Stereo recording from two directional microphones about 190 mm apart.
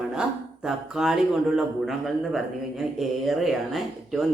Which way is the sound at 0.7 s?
Centre (ahead or behind).